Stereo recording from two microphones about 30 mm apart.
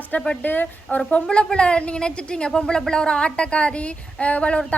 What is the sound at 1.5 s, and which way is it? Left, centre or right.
A woman's voice, left.